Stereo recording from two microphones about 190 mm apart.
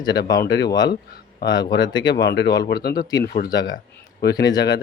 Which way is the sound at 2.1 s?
60° left (ahead or behind).